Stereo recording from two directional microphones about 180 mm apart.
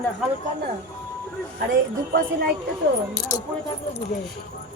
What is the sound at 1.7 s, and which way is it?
Speech, 55° right (ahead or behind).